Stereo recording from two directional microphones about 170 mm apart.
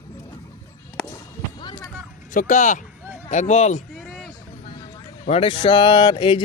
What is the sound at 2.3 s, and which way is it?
Speech, 50° left (ahead or behind).